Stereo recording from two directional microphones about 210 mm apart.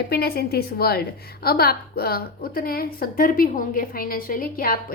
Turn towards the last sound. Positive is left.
turn(degrees=45)  # may be behind; listen again after turning